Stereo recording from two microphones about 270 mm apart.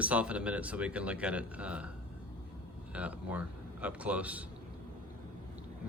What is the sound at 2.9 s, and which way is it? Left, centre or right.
A man's voice, centre.